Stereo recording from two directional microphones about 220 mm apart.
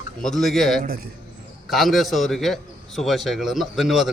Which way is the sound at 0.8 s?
40° right (ahead or behind).